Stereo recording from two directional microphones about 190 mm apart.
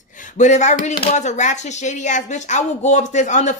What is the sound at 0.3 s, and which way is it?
Speech, 40° left (ahead or behind).